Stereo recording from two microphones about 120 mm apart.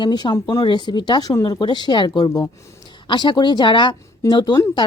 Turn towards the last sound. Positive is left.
turn(degrees=40)  # may be behind; listen again after turning